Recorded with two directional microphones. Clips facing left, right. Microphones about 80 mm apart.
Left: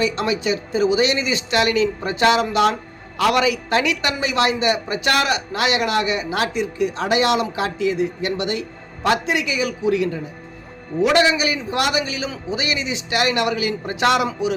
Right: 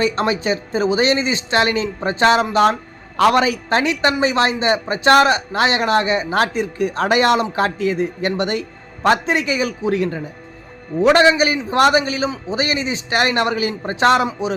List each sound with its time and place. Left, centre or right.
0.0 s a woman's voice: right